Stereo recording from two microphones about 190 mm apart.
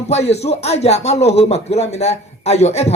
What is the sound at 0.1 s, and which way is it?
Speech, 35° left (ahead or behind).